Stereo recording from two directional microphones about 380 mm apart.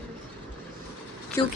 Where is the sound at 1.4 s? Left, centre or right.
Centre.